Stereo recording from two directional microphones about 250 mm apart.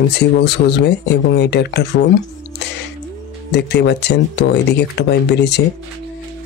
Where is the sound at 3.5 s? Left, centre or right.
Left.